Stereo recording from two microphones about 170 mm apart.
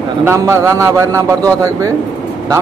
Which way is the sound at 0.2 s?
15° right (ahead or behind).